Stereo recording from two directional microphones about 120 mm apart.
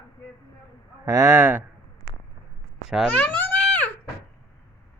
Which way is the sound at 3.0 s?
15° left (ahead or behind).